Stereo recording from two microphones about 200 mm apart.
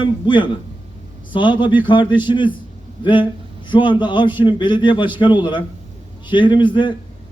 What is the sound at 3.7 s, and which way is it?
A man's voice, 25° left (ahead or behind).